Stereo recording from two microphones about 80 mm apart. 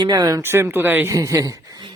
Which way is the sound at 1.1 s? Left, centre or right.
Right.